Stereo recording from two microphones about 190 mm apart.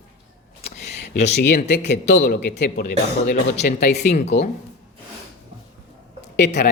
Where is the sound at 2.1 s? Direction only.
65° left (ahead or behind).